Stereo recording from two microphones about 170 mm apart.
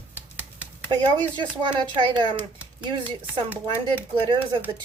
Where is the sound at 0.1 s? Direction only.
10° right (ahead or behind).